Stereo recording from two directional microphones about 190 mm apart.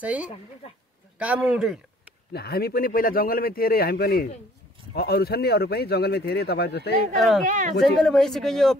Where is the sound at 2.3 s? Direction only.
55° left (ahead or behind).